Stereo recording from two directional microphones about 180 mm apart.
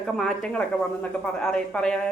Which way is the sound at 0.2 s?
5° left (ahead or behind).